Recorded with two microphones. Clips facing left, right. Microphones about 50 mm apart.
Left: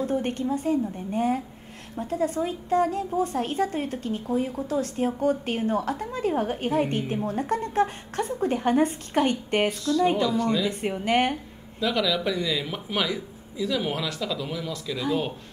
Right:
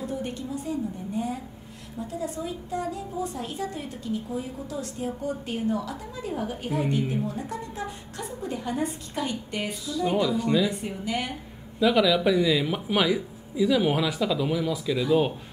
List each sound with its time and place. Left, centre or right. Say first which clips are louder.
0.0 s a woman's voice: left 6 dB; left
9.7 s speech: left 2 dB; centre
10.8 s a woman's voice: left 7 dB; left
11.8 s speech: right 4 dB; centre